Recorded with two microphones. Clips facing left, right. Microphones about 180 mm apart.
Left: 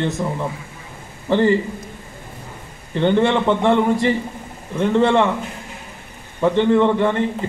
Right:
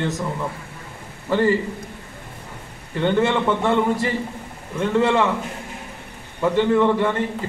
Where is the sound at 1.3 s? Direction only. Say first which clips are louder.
Left 3 dB; 25° left (ahead or behind).